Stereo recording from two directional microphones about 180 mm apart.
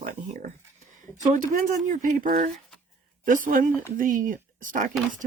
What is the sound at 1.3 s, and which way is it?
Speech, 45° right (ahead or behind).